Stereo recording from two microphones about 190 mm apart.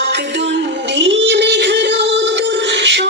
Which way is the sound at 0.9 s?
65° right (ahead or behind).